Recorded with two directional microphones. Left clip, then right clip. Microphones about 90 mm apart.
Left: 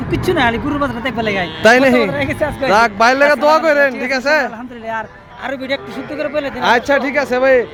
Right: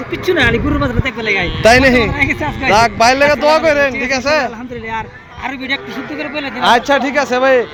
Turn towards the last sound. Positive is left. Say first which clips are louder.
# right 1 dB
turn(degrees=10)  # may be behind; listen again after turning